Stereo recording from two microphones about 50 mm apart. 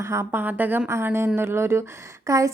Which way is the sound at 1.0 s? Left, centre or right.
Right.